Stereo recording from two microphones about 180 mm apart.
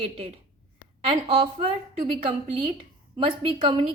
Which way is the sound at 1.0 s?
30° right (ahead or behind).